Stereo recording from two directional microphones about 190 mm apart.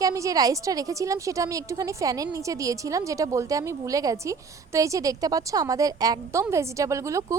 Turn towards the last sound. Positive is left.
turn(degrees=-15)  # may be behind; listen again after turning